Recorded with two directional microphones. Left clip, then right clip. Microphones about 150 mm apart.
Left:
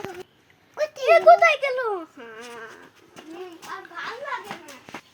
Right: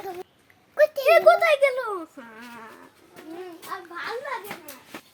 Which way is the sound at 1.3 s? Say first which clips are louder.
Left 3 dB; 40° right (ahead or behind).